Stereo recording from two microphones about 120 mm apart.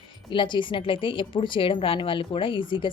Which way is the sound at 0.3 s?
40° left (ahead or behind).